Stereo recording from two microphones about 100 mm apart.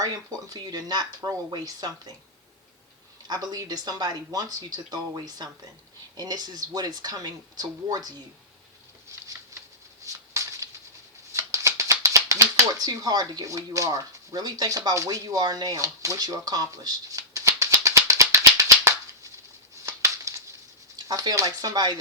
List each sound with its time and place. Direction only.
0.0 s speech: 40° right (ahead or behind)
3.2 s speech: 40° right (ahead or behind)
9.1 s a sound: 30° right (ahead or behind)
12.8 s speech: 40° right (ahead or behind)
19.8 s a sound: 30° right (ahead or behind)
20.9 s speech: 40° right (ahead or behind)